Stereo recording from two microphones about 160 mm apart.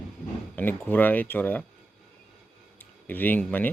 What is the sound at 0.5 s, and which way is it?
Speech, 10° left (ahead or behind).